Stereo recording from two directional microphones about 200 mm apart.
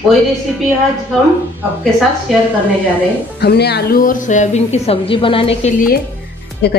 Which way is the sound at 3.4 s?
55° left (ahead or behind).